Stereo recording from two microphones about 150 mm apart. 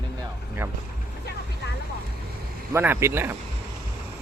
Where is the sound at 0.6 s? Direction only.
15° right (ahead or behind).